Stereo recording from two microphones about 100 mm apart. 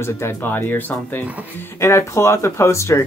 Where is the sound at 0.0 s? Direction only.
25° left (ahead or behind).